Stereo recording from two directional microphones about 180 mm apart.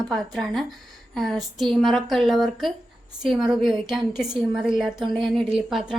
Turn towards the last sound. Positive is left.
turn(degrees=0)  # may be behind; listen again after turning